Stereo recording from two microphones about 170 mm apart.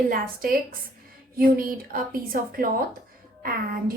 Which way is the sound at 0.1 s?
60° right (ahead or behind).